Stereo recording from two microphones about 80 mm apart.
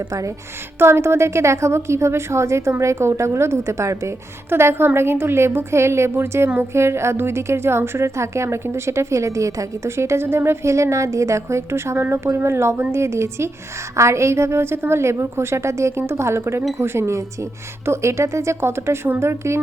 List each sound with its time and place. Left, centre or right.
0.1 s speech: right
0.8 s a woman's voice: right